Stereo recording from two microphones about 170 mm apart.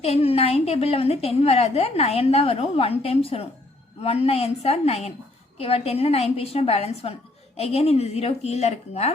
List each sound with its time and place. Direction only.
0.0 s a woman's voice: 35° left (ahead or behind)